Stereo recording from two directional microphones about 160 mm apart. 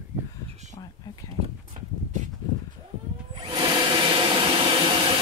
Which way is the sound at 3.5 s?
35° right (ahead or behind).